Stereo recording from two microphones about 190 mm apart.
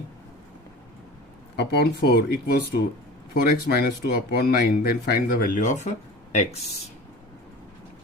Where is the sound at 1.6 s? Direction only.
55° left (ahead or behind); by 5.9 s 40° left (ahead or behind).